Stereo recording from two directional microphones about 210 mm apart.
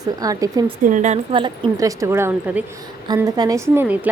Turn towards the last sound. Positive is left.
turn(degrees=-10)  # may be behind; listen again after turning